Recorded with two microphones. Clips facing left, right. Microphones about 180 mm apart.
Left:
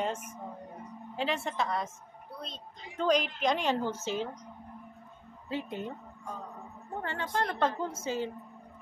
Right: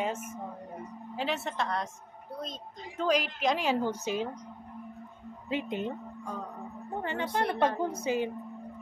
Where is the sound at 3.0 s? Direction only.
5° right (ahead or behind).